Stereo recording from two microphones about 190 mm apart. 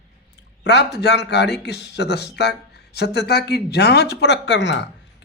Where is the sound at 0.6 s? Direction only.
65° left (ahead or behind).